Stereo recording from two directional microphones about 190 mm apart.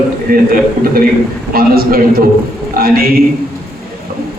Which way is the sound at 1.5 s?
50° right (ahead or behind).